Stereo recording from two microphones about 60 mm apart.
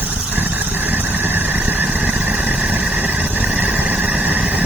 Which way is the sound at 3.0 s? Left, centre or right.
Right.